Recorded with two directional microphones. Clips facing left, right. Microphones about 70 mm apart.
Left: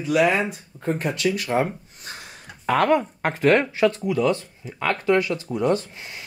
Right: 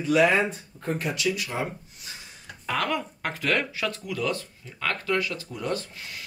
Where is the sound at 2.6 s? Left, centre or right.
Left.